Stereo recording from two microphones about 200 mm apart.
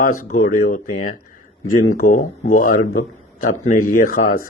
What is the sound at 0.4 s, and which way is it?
A man's voice, 40° left (ahead or behind).